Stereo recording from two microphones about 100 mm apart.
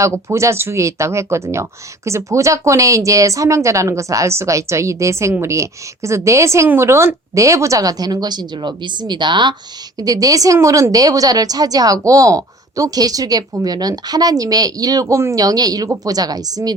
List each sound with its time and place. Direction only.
0.0 s a woman's voice: 30° right (ahead or behind); by 9.6 s 50° right (ahead or behind)
10.0 s a woman's voice: 40° right (ahead or behind)